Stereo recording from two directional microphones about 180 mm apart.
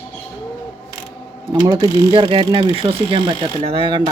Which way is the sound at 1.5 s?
20° right (ahead or behind).